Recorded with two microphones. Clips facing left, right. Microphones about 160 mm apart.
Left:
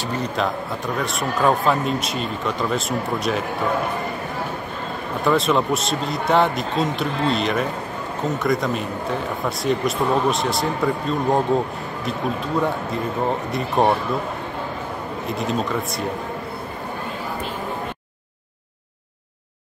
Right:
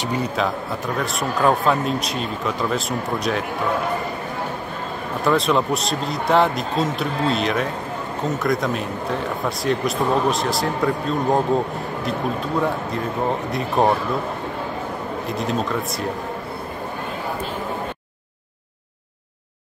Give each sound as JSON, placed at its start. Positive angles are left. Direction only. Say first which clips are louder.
{"t": 0.0, "sound": "a man's voice", "louder": "right 2 dB", "side_deg": -10}
{"t": 0.9, "sound": "speech", "louder": "even", "side_deg": 0}
{"t": 5.2, "sound": "speech", "louder": "even", "side_deg": 0}
{"t": 15.2, "sound": "speech", "louder": "left 1 dB", "side_deg": 0}